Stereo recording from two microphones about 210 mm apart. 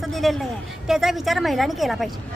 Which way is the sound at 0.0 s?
Centre (ahead or behind).